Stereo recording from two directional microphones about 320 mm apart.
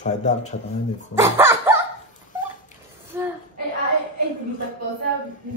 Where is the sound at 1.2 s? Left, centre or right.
Centre.